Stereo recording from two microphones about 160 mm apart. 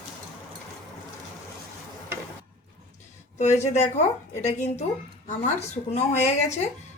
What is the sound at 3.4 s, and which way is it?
A woman's voice, 45° left (ahead or behind).